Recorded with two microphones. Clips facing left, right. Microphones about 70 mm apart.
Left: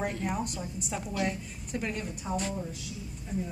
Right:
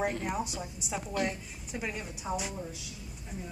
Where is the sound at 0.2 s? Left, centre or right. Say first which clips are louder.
Left 1 dB; centre.